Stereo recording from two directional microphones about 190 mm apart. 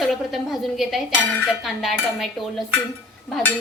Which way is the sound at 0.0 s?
Centre (ahead or behind).